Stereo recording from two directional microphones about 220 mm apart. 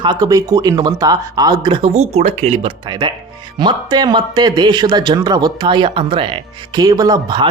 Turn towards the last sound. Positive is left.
turn(degrees=-20)  # may be behind; listen again after turning